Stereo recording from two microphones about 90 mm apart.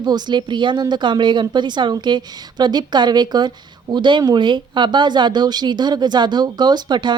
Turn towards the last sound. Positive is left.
turn(degrees=-55)  # may be behind; listen again after turning